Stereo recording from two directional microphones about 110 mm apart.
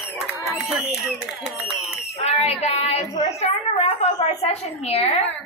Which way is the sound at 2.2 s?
75° left (ahead or behind).